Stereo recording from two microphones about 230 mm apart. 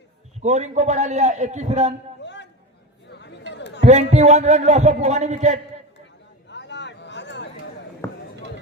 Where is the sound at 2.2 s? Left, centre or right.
Left.